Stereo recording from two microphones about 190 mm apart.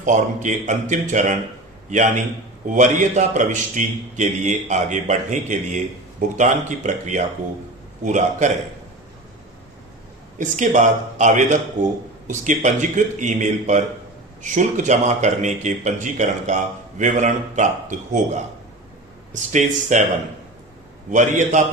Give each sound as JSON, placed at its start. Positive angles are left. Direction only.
{"t": 0.0, "sound": "a man's voice", "side_deg": -40}
{"t": 10.3, "sound": "a man's voice", "side_deg": -40}
{"t": 19.3, "sound": "a man's voice", "side_deg": -40}
{"t": 21.1, "sound": "a man's voice", "side_deg": -40}